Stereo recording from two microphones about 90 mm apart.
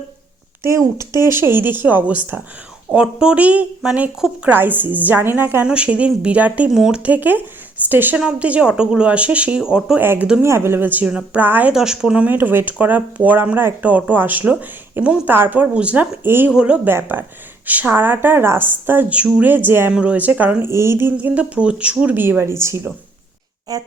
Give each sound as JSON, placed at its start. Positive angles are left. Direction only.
{"t": 0.6, "sound": "a child's voice", "side_deg": -35}
{"t": 5.6, "sound": "a woman's voice", "side_deg": -10}
{"t": 10.0, "sound": "a woman's voice", "side_deg": -25}
{"t": 11.7, "sound": "a woman's voice", "side_deg": -5}
{"t": 16.5, "sound": "a woman's voice", "side_deg": -10}
{"t": 19.9, "sound": "speech", "side_deg": -10}
{"t": 20.7, "sound": "a woman's voice", "side_deg": -30}
{"t": 21.2, "sound": "a woman's voice", "side_deg": -15}
{"t": 23.7, "sound": "speech", "side_deg": -45}